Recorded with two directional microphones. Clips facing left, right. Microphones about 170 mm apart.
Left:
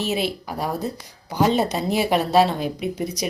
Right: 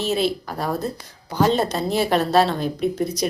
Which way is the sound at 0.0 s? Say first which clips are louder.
Right 2 dB; 15° left (ahead or behind).